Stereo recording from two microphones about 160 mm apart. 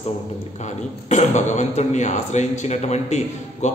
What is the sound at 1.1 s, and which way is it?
A man's voice, 45° left (ahead or behind).